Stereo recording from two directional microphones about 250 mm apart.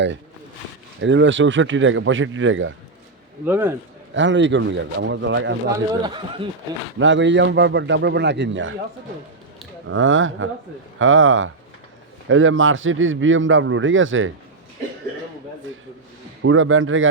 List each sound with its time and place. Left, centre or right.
1.0 s a man's voice: right
3.4 s a man's voice: centre
4.1 s a man's voice: right
6.0 s speech: centre
7.0 s a man's voice: right
9.8 s a man's voice: right
16.4 s a man's voice: right